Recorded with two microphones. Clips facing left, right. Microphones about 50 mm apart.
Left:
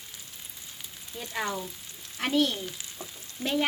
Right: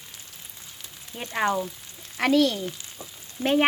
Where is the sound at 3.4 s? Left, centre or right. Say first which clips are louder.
Right 6 dB; right.